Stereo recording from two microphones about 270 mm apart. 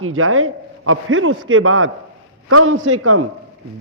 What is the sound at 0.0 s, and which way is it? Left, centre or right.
A man's voice, right.